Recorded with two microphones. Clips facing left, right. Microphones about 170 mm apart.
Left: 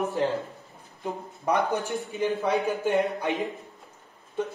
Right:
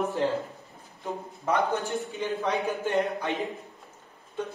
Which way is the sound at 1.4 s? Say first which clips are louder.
Left 1 dB; 15° left (ahead or behind).